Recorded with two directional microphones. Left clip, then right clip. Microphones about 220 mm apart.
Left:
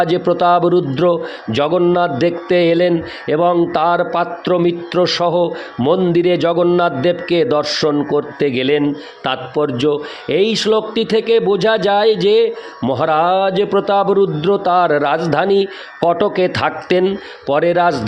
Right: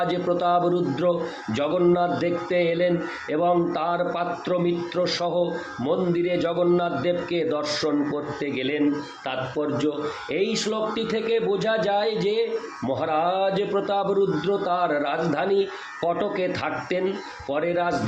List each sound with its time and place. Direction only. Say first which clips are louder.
0.0 s speech: left 9 dB; 45° left (ahead or behind)